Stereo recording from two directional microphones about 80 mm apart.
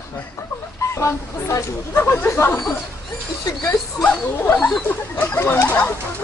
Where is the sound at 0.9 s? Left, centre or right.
Left.